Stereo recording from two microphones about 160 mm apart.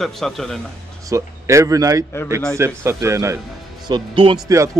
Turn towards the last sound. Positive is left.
turn(degrees=-30)  # may be behind; listen again after turning